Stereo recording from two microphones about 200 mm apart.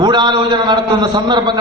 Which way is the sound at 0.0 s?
20° right (ahead or behind).